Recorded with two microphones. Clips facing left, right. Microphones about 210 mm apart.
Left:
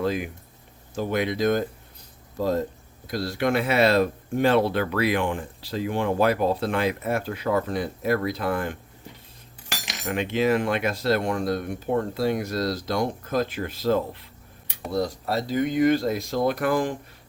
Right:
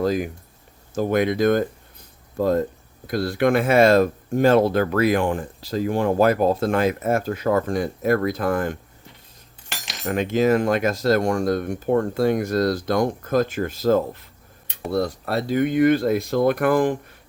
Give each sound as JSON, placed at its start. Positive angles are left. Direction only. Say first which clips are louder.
{"t": 0.0, "sound": "speech", "louder": "right 4 dB", "side_deg": -40}
{"t": 10.1, "sound": "speech", "louder": "right 4 dB", "side_deg": -40}
{"t": 14.9, "sound": "speech", "louder": "right 2 dB", "side_deg": -60}